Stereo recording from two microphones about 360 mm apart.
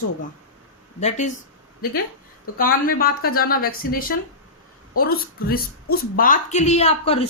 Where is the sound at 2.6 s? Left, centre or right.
Left.